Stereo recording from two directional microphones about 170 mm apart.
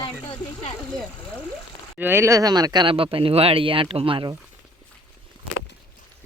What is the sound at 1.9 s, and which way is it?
Speech, 10° right (ahead or behind).